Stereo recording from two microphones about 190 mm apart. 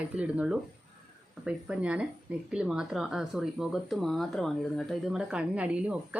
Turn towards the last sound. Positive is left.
turn(degrees=-5)  # may be behind; listen again after turning